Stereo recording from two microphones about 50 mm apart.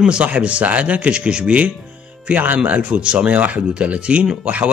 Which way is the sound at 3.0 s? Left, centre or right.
Centre.